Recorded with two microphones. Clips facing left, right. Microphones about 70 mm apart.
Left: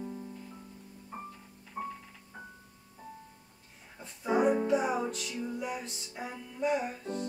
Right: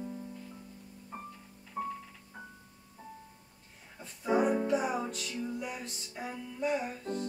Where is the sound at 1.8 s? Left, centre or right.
Centre.